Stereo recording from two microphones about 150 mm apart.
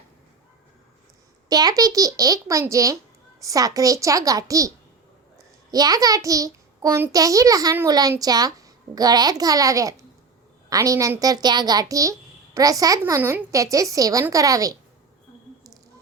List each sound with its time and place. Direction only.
1.5 s a child's voice: 25° right (ahead or behind)